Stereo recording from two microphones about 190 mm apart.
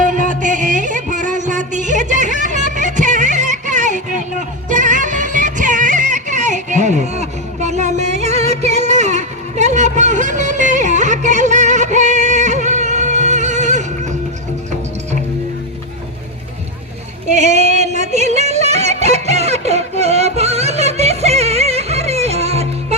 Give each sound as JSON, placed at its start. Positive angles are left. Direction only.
{"t": 0.0, "sound": "music", "side_deg": -40}
{"t": 17.3, "sound": "yodeling", "side_deg": -35}